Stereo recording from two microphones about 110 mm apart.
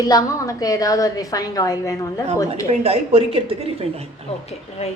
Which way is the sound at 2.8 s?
65° right (ahead or behind).